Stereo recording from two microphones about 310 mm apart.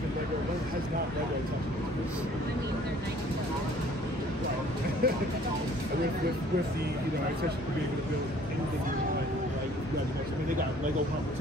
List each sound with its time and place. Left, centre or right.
5.0 s speech: right